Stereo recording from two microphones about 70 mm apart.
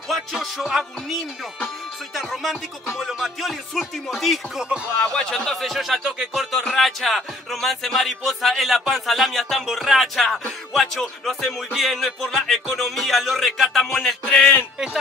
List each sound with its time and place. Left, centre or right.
0.1 s music: centre
2.1 s music: centre
5.1 s speech: centre
5.6 s music: centre
6.6 s music: centre
14.2 s speech: centre